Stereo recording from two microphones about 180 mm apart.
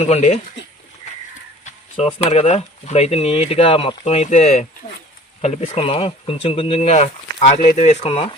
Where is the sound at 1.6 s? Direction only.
30° left (ahead or behind).